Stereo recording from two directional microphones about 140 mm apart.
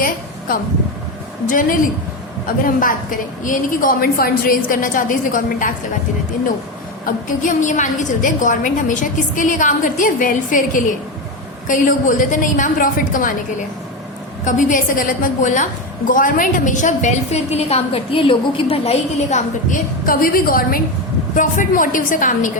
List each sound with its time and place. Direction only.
0.0 s a sound: 90° left
1.5 s a woman's voice: 75° left (ahead or behind)
7.0 s a woman's voice: 70° left (ahead or behind)
14.4 s a woman's voice: 65° left (ahead or behind); by 19.4 s 45° left (ahead or behind)
19.7 s a woman's voice: 90° left
21.3 s a woman's voice: 70° left (ahead or behind)